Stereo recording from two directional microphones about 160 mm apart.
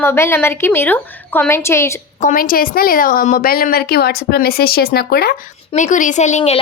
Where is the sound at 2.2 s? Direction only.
60° left (ahead or behind).